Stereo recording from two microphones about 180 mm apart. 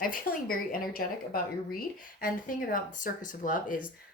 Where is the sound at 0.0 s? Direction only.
55° left (ahead or behind).